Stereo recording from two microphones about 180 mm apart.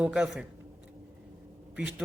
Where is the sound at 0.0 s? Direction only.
5° right (ahead or behind).